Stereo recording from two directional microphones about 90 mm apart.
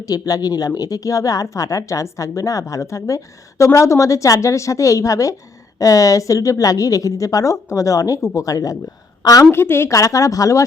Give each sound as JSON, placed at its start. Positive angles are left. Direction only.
{"t": 0.0, "sound": "a woman's voice", "side_deg": 45}
{"t": 9.5, "sound": "a woman's voice", "side_deg": 25}